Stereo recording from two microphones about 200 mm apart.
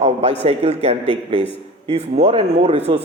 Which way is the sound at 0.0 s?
30° right (ahead or behind).